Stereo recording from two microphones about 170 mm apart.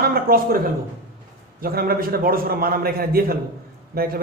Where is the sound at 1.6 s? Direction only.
60° right (ahead or behind).